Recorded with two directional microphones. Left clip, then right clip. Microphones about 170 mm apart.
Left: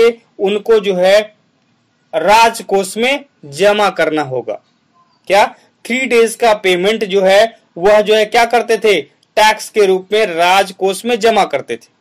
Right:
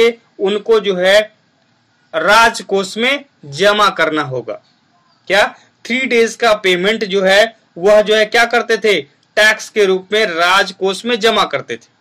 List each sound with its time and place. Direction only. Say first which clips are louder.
0.0 s speech: left 1 dB; 25° left (ahead or behind)